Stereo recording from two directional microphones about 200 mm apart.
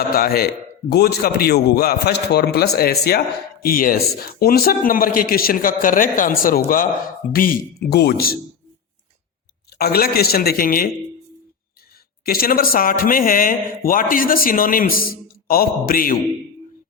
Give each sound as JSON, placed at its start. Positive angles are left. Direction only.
{"t": 0.2, "sound": "speech", "side_deg": 50}
{"t": 9.7, "sound": "speech", "side_deg": 50}
{"t": 12.2, "sound": "speech", "side_deg": 45}